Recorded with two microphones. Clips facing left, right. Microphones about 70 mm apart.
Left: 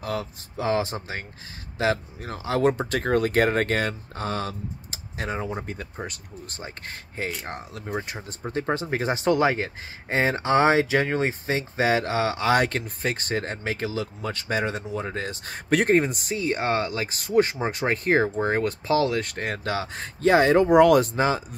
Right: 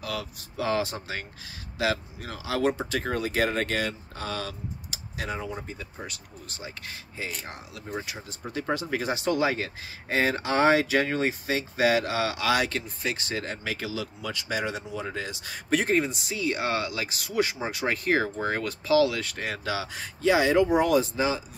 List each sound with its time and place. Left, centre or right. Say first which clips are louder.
0.0 s speech: left 4 dB; left
8.4 s speech: left 3 dB; left
20.7 s speech: left 6 dB; left